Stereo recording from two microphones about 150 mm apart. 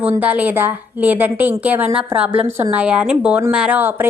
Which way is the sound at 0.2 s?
10° right (ahead or behind).